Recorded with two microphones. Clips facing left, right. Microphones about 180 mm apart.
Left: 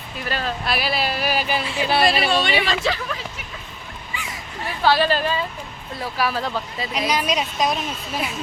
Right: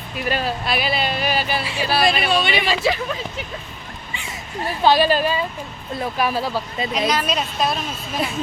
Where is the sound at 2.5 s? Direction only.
10° right (ahead or behind).